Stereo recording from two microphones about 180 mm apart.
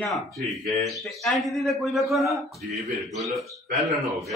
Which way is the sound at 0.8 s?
Centre (ahead or behind).